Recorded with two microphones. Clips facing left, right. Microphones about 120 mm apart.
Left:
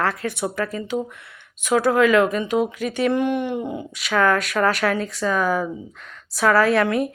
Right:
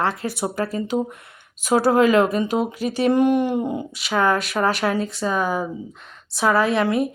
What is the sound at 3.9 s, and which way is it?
Speech, 25° right (ahead or behind).